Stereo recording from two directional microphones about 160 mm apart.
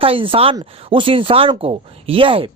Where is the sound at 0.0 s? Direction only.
35° right (ahead or behind).